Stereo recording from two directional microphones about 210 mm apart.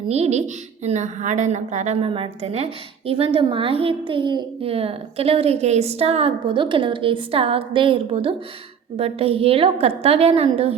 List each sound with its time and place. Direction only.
0.1 s a woman's voice: 30° right (ahead or behind)